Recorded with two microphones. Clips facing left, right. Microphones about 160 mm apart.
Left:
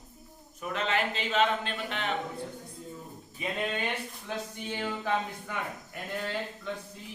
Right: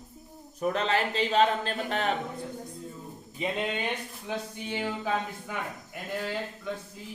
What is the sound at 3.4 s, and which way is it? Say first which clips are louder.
Speech: right 2 dB; 20° right (ahead or behind).